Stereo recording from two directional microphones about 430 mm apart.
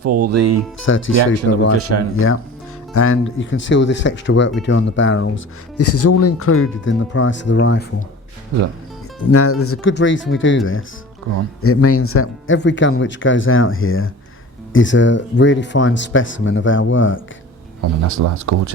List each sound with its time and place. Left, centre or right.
0.0 s speech: right
0.9 s speech: left
1.7 s speech: right
2.1 s speech: left
9.2 s speech: left
11.6 s speech: left
17.7 s speech: right